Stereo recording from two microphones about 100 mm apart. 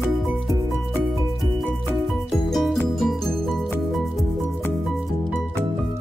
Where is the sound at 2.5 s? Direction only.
Centre (ahead or behind).